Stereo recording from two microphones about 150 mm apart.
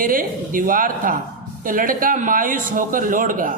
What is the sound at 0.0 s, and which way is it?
A man's voice, 65° right (ahead or behind).